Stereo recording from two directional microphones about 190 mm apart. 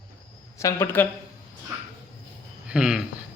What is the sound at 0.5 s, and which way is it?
Speech, 15° left (ahead or behind).